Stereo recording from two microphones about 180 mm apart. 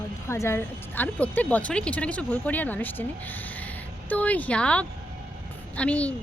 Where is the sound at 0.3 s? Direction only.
15° left (ahead or behind).